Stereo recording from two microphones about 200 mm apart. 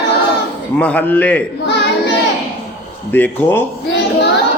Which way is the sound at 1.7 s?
60° left (ahead or behind).